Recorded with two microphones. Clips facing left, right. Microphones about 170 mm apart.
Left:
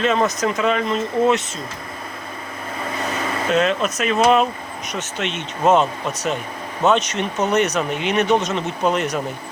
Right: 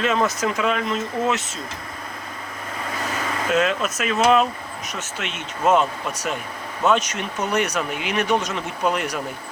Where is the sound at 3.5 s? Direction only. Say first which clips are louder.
Left 2 dB; 5° right (ahead or behind).